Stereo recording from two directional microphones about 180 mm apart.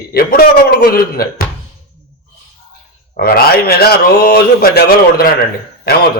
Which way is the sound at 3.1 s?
55° left (ahead or behind).